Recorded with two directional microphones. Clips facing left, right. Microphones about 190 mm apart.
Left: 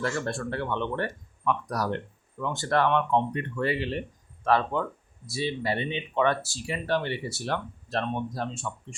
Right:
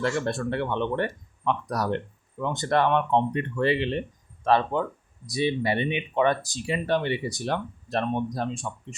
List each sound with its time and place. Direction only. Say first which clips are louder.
0.0 s speech: right 3 dB; 20° right (ahead or behind)